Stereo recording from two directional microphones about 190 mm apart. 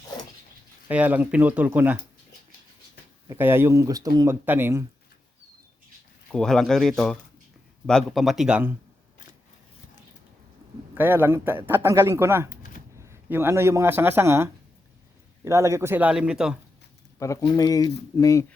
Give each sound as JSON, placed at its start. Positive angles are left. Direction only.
{"t": 0.9, "sound": "a man's voice", "side_deg": -10}
{"t": 3.2, "sound": "a man's voice", "side_deg": -10}
{"t": 6.3, "sound": "speech", "side_deg": 0}
{"t": 10.9, "sound": "a man's voice", "side_deg": -10}
{"t": 17.2, "sound": "speech", "side_deg": 15}